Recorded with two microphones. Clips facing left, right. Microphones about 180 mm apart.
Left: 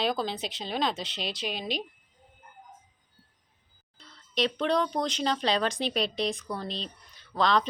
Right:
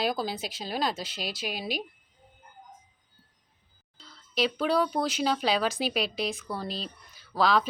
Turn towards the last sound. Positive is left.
turn(degrees=-5)  # may be behind; listen again after turning